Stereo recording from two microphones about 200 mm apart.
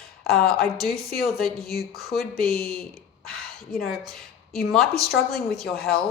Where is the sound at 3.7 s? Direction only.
5° left (ahead or behind).